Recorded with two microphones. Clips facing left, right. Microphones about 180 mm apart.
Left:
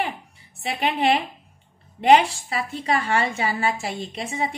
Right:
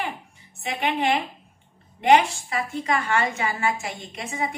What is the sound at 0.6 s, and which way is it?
A woman's voice, 35° left (ahead or behind).